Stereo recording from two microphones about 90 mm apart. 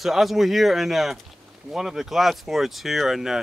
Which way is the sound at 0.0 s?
Centre (ahead or behind).